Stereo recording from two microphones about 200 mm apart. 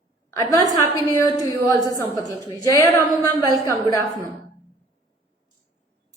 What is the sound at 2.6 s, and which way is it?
A woman's voice, 15° left (ahead or behind).